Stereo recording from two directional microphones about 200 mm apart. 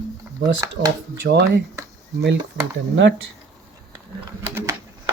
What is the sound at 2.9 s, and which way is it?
Speech, 65° right (ahead or behind).